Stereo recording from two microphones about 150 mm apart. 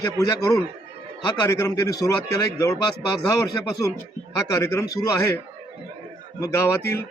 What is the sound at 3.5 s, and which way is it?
Speech, 20° left (ahead or behind).